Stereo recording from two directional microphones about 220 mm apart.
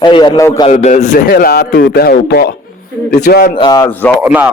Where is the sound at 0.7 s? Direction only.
30° left (ahead or behind).